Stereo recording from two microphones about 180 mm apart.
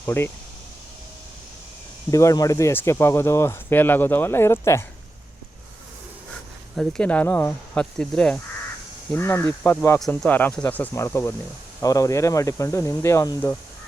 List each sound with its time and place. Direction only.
0.0 s speech: 15° left (ahead or behind)
2.0 s speech: 20° left (ahead or behind)
6.7 s speech: 5° left (ahead or behind)